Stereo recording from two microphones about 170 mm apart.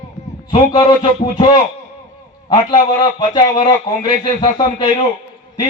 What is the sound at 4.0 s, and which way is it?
Speech, 30° left (ahead or behind).